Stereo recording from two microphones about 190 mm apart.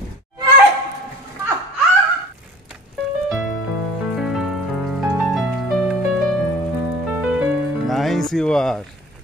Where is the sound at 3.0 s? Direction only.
60° right (ahead or behind).